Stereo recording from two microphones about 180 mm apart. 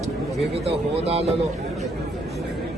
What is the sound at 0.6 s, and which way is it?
Speech, 35° right (ahead or behind).